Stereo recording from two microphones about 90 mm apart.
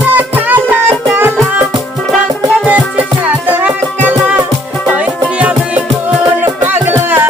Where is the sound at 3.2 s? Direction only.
20° right (ahead or behind).